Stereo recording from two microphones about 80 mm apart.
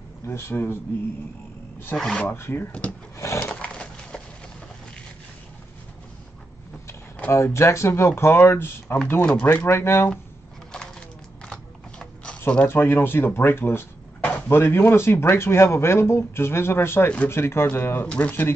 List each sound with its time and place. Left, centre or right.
0.3 s speech: left
2.0 s speech: centre
2.2 s speech: left
3.3 s wood: centre
7.2 s speech: left
8.8 s speech: centre
9.5 s speech: left
10.7 s a sound: centre
12.6 s speech: left
18.0 s speech: centre